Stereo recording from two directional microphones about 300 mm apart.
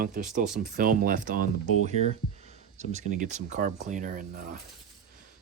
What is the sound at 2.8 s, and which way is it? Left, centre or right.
Speech, right.